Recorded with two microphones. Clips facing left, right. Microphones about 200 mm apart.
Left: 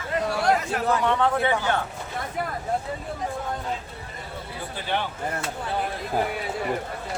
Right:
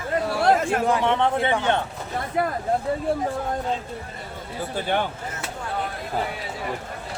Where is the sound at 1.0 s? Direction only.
25° right (ahead or behind).